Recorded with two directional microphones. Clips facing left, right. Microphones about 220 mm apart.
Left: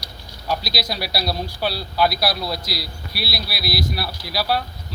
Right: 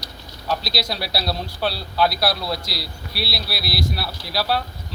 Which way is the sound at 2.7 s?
30° right (ahead or behind).